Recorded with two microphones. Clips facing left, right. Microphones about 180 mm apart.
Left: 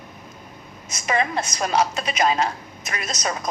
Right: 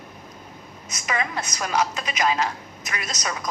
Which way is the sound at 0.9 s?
30° left (ahead or behind).